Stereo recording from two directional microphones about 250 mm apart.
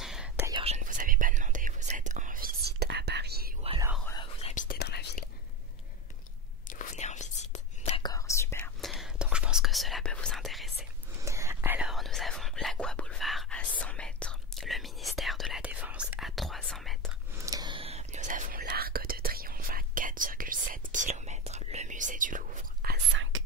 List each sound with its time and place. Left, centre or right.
0.0 s whispering: centre
0.5 s whispering: right
4.0 s whispering: centre
4.6 s whispering: left
6.7 s whispering: left
8.0 s whispering: centre
11.2 s whispering: centre
17.4 s whispering: centre; by 22.9 s right